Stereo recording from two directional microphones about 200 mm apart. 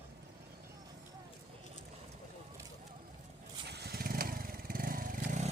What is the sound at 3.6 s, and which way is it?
Vehicle, 55° right (ahead or behind).